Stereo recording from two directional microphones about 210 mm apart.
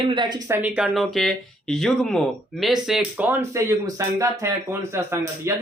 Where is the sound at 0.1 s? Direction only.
20° right (ahead or behind).